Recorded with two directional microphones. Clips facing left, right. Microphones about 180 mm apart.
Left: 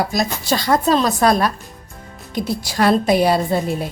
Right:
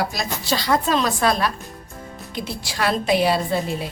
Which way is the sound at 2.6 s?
40° left (ahead or behind).